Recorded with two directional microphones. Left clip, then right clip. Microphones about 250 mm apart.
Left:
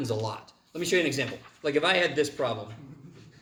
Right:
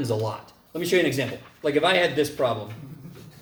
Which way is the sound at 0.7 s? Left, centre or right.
Left.